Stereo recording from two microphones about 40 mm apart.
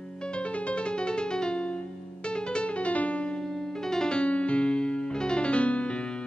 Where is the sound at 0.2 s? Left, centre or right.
Left.